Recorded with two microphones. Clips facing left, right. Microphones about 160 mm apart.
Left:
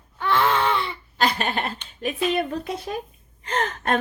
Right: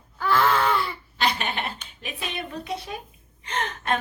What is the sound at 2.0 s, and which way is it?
Speech, 45° left (ahead or behind).